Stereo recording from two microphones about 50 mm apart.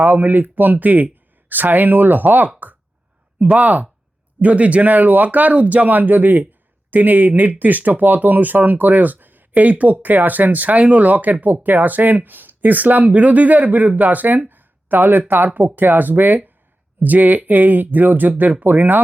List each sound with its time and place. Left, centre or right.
0.0 s speech: right